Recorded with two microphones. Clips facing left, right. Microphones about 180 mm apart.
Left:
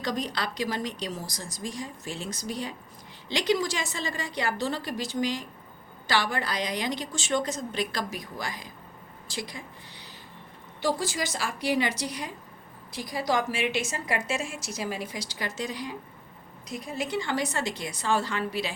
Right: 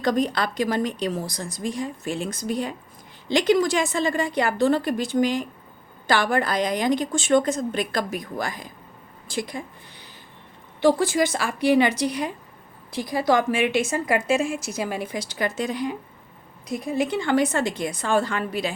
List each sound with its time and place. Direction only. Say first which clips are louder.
0.0 s a woman's voice: right 8 dB; 50° right (ahead or behind)